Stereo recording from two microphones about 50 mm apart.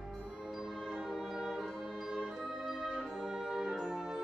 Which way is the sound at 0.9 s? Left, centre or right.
Centre.